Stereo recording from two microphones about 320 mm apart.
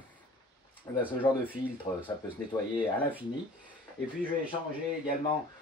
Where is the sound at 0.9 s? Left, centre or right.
Centre.